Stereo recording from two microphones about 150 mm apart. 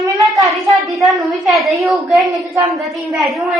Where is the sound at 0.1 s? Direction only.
Centre (ahead or behind).